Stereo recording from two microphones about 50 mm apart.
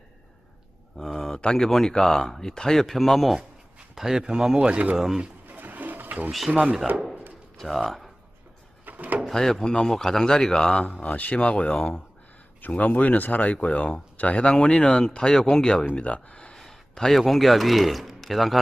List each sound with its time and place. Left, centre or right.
0.9 s a sound: centre
1.5 s a man's voice: centre
4.5 s speech: right
4.9 s speech: centre
5.5 s pigeon: right
6.5 s speech: right
7.6 s speech: centre
8.9 s drawer open or close: right
9.2 s speech: centre
11.0 s speech: left
12.6 s speech: left
14.5 s speech: centre
16.6 s a sound: centre
17.2 s speech: centre